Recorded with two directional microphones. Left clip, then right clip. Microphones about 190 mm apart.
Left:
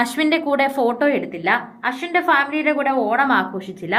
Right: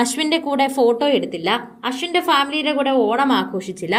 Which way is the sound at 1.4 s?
40° right (ahead or behind).